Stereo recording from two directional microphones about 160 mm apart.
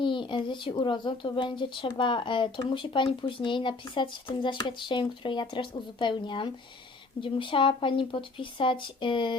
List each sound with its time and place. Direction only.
0.0 s speech: 30° left (ahead or behind)